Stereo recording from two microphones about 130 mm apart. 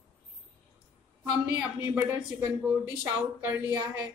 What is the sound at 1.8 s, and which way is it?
Speech, 20° right (ahead or behind).